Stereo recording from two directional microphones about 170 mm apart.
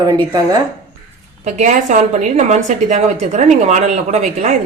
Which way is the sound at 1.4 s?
45° right (ahead or behind).